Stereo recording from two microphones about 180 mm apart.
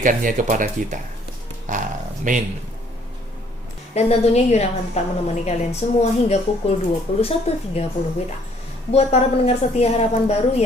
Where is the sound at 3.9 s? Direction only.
35° left (ahead or behind).